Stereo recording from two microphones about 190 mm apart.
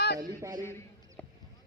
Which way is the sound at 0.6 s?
15° left (ahead or behind).